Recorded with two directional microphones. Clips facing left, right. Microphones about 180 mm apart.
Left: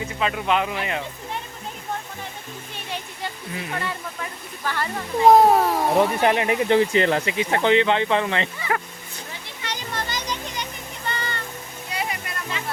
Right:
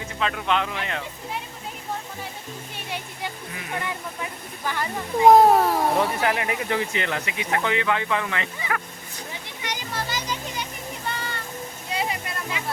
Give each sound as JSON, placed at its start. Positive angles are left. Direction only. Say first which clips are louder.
{"t": 0.2, "sound": "speech", "louder": "left 2 dB", "side_deg": 5}
{"t": 2.7, "sound": "a sound", "louder": "left 1 dB", "side_deg": -10}
{"t": 3.8, "sound": "speech", "louder": "left 1 dB", "side_deg": -15}
{"t": 5.3, "sound": "a child's voice", "louder": "even", "side_deg": 0}
{"t": 5.9, "sound": "speech", "louder": "left 4 dB", "side_deg": 25}
{"t": 9.3, "sound": "children playing", "louder": "even", "side_deg": -15}
{"t": 11.9, "sound": "music", "louder": "right 1 dB", "side_deg": -25}
{"t": 12.6, "sound": "music", "louder": "even", "side_deg": -15}